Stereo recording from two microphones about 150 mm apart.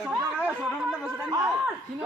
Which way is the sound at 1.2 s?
25° right (ahead or behind).